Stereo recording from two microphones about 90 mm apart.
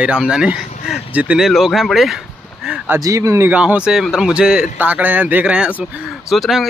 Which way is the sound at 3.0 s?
35° right (ahead or behind).